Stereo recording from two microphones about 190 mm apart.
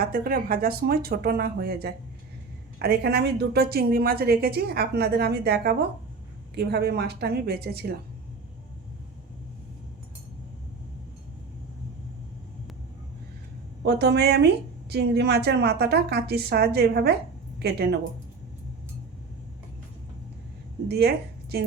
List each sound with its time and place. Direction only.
0.0 s a woman's voice: 50° right (ahead or behind)
13.8 s a woman's voice: 60° right (ahead or behind)
20.8 s a woman's voice: 60° right (ahead or behind)